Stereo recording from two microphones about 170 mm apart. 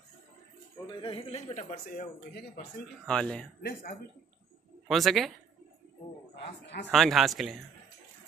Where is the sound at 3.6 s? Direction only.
50° left (ahead or behind).